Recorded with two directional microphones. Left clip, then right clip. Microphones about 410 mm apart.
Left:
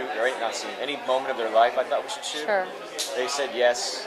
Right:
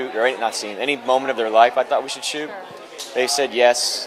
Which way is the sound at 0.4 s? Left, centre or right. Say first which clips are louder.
Right 6 dB; right.